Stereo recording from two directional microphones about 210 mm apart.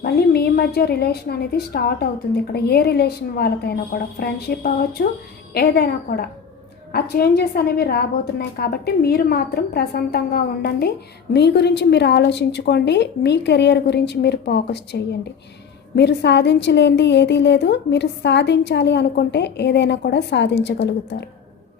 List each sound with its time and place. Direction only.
0.0 s a woman's voice: 50° left (ahead or behind)